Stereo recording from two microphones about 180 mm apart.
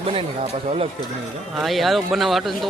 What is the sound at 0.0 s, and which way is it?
Speech, 30° right (ahead or behind).